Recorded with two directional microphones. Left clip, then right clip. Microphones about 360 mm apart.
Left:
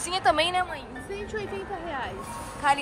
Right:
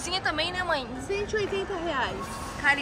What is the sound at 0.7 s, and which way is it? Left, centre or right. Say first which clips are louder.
Speech: right 7 dB; centre.